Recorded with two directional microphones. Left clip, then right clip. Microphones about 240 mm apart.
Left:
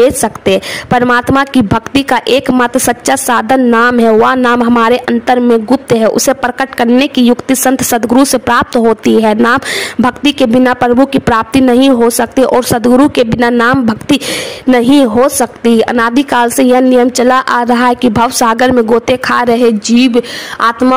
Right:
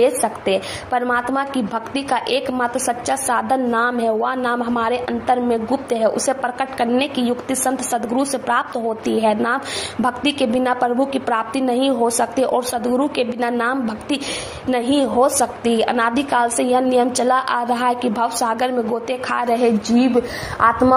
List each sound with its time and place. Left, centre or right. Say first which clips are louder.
0.0 s a woman's voice: left 8 dB; left